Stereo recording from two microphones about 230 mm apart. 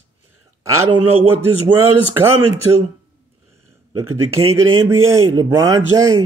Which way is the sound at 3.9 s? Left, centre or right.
Right.